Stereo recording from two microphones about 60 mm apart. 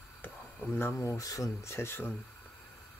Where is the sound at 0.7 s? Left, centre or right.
Left.